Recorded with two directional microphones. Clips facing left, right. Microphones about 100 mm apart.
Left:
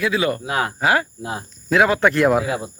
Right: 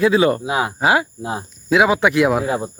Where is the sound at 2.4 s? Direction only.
35° right (ahead or behind).